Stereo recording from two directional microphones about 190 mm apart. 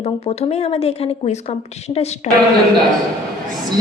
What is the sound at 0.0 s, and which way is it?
A woman's voice, 35° left (ahead or behind).